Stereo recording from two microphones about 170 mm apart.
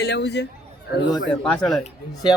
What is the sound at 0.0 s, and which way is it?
Speech, 80° left.